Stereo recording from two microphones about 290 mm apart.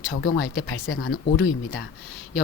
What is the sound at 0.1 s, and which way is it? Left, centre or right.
Speech, left.